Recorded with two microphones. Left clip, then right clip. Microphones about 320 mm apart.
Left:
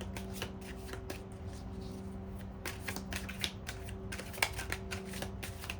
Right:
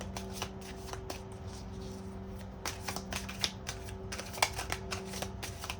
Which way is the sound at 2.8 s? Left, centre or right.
Centre.